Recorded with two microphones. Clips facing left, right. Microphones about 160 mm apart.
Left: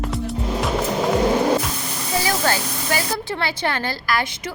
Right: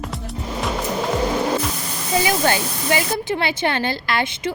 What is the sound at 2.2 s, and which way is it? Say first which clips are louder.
A woman's voice: right 1 dB; 20° right (ahead or behind).